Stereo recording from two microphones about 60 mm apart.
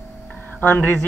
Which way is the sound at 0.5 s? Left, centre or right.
Left.